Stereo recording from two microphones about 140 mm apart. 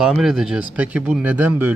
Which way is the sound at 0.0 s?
Centre (ahead or behind).